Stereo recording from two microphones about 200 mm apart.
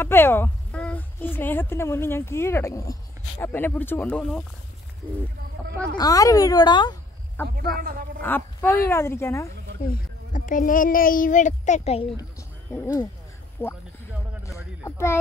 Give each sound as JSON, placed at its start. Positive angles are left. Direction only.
{"t": 0.0, "sound": "speech", "side_deg": 10}
{"t": 5.9, "sound": "speech", "side_deg": 20}
{"t": 7.4, "sound": "speech", "side_deg": -50}
{"t": 8.2, "sound": "speech", "side_deg": 10}
{"t": 9.8, "sound": "a child's voice", "side_deg": 40}
{"t": 12.2, "sound": "speech", "side_deg": 15}
{"t": 14.9, "sound": "speech", "side_deg": 15}